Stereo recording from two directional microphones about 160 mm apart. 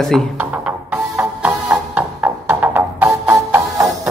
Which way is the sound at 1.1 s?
10° right (ahead or behind).